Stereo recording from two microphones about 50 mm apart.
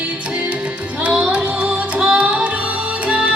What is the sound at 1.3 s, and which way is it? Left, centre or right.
Music, right.